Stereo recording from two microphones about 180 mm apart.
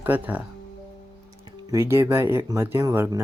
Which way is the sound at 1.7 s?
15° right (ahead or behind).